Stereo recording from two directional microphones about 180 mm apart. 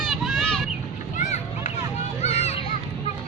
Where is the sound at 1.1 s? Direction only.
40° left (ahead or behind).